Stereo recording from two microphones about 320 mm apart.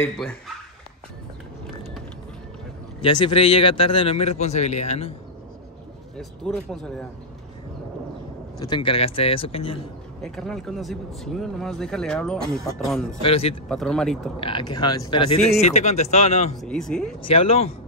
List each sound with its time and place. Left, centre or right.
3.0 s a man's voice: centre
6.1 s speech: centre
8.5 s a man's voice: centre
10.2 s speech: centre
13.2 s a man's voice: centre
13.7 s speech: centre
14.4 s a man's voice: centre
16.6 s speech: centre
17.2 s a man's voice: centre